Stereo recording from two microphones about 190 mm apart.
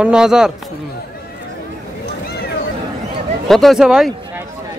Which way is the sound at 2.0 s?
60° left (ahead or behind).